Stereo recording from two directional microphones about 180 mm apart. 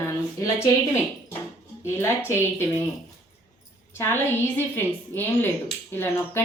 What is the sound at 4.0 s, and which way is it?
A woman's voice, 10° left (ahead or behind).